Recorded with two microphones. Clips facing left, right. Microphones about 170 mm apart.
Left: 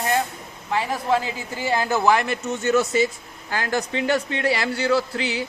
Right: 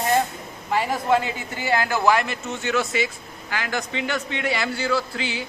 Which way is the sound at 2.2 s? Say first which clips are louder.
Left 5 dB; 40° left (ahead or behind).